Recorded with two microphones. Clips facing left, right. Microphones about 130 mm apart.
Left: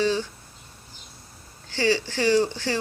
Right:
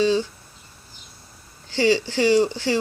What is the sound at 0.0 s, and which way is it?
Speech, 15° right (ahead or behind).